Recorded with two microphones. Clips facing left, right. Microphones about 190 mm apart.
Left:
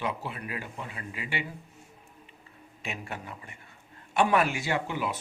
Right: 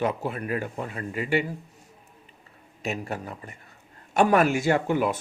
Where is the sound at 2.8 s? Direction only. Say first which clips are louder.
Right 7 dB; 40° right (ahead or behind).